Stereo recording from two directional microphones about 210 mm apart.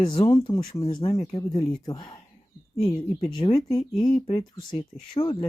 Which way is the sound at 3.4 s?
25° left (ahead or behind).